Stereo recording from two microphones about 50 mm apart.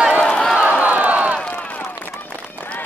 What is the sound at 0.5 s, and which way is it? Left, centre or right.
Crowd, right.